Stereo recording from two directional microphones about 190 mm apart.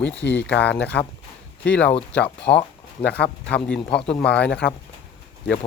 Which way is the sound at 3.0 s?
60° left (ahead or behind).